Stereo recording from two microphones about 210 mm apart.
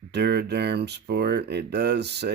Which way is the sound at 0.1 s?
50° right (ahead or behind).